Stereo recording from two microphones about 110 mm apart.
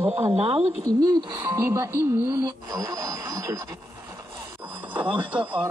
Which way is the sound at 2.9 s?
30° right (ahead or behind).